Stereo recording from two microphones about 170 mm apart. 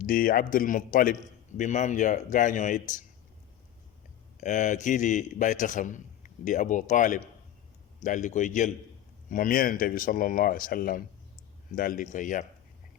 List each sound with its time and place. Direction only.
0.0 s a man's voice: 55° left (ahead or behind)
4.4 s a man's voice: 45° left (ahead or behind)